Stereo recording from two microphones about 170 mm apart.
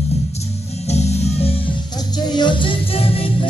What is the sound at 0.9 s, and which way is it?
Music, 40° left (ahead or behind).